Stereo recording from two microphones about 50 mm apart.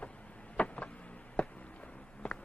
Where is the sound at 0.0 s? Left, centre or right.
Left.